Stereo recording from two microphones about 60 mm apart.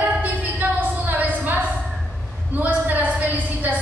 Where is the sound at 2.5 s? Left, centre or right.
Right.